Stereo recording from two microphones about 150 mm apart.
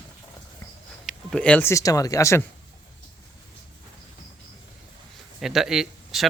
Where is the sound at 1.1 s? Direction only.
10° left (ahead or behind).